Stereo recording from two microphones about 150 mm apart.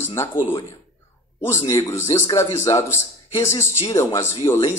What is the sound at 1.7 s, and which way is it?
Speech, 20° left (ahead or behind).